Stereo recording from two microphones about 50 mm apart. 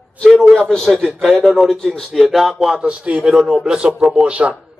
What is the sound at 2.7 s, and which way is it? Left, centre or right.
Speech, right.